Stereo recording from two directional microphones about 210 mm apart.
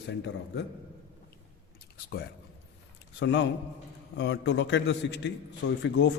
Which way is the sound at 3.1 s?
60° left (ahead or behind).